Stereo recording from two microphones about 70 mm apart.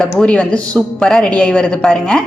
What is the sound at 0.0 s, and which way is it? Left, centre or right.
A woman's voice, centre.